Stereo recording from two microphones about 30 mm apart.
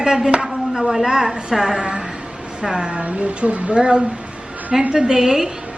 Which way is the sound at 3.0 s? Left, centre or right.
Right.